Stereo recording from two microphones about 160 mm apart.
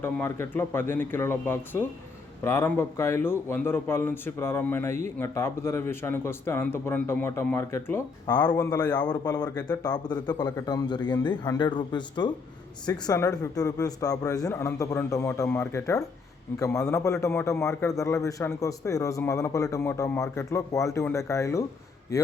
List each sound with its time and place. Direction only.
0.0 s speech: 15° left (ahead or behind)
8.3 s a man's voice: 25° left (ahead or behind)